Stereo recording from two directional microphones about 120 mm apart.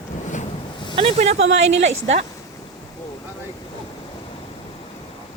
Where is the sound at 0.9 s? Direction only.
50° right (ahead or behind).